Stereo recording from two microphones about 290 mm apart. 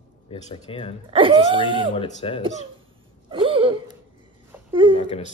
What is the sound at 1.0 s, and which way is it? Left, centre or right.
Speech, centre.